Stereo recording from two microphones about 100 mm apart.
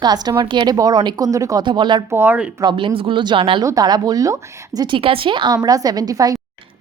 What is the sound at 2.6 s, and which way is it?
Speech, 50° right (ahead or behind).